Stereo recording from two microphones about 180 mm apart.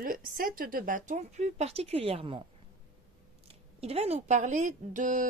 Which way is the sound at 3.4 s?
35° right (ahead or behind).